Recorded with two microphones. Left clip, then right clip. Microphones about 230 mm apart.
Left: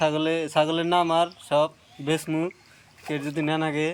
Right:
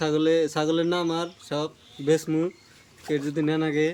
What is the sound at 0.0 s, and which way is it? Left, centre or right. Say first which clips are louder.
Speech: right 2 dB; centre.